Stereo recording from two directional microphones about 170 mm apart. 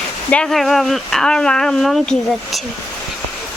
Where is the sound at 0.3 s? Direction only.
5° left (ahead or behind).